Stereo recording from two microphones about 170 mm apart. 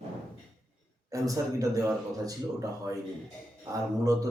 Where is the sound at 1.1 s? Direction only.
20° right (ahead or behind).